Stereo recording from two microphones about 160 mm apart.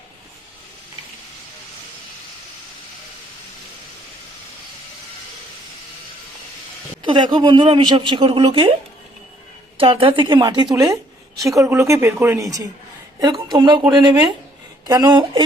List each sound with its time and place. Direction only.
7.0 s a woman's voice: 30° right (ahead or behind)
9.7 s a woman's voice: 35° right (ahead or behind)